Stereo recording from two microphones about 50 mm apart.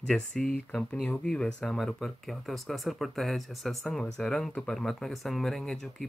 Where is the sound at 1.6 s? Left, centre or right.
Centre.